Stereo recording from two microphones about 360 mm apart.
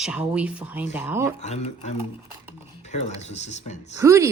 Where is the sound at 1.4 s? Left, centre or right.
Centre.